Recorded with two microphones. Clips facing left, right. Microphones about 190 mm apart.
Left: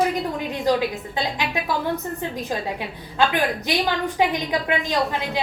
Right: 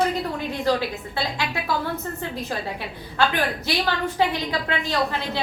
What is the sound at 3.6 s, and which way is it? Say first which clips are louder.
A woman's voice: left 2 dB; 15° left (ahead or behind).